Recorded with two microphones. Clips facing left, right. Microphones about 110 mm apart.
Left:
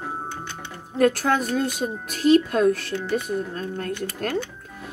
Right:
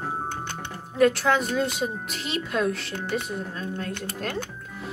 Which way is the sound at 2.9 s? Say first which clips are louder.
Left 4 dB; 60° right (ahead or behind).